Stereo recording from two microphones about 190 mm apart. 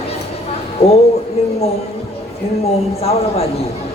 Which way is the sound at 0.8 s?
35° left (ahead or behind).